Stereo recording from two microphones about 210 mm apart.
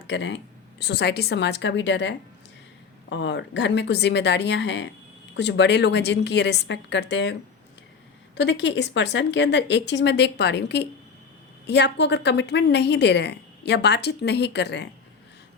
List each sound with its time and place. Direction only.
0.1 s a woman's voice: 60° left (ahead or behind)
8.4 s a woman's voice: 55° left (ahead or behind)